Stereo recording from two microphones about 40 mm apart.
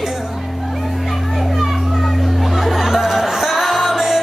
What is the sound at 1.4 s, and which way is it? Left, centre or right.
Music, centre.